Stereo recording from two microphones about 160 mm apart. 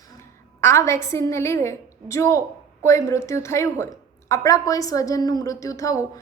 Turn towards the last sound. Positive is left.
turn(degrees=20)  # may be behind; listen again after turning